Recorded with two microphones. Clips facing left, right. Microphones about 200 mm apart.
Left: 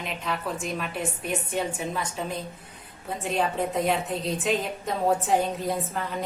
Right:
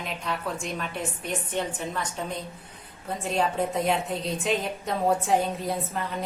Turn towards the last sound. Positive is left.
turn(degrees=0)  # may be behind; listen again after turning